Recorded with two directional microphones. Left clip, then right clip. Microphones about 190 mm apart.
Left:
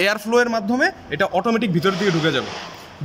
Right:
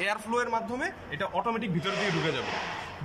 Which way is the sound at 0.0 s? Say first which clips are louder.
Left 11 dB; 60° left (ahead or behind).